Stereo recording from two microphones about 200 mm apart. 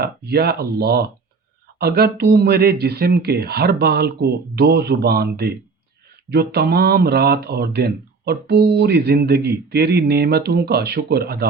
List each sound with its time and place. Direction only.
0.0 s speech: 50° right (ahead or behind)